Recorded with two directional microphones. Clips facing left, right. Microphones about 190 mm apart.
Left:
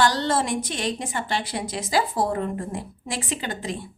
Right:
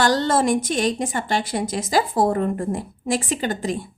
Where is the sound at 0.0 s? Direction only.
45° right (ahead or behind).